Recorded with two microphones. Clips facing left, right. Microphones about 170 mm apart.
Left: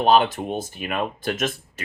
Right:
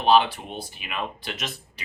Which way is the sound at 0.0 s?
45° left (ahead or behind).